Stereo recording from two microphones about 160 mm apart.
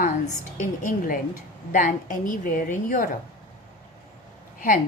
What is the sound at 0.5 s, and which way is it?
A woman's voice, 55° left (ahead or behind).